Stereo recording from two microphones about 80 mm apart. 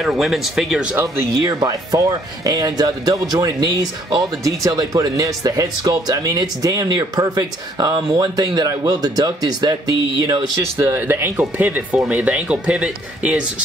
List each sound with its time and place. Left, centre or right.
0.0 s speech: centre
1.0 s speech: right
10.6 s speech: right